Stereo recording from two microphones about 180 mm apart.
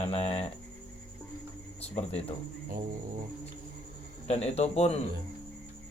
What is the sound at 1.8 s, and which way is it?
Speech, 35° left (ahead or behind).